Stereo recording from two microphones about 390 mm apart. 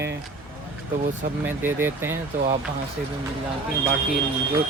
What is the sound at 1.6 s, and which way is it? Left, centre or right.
Speech, centre.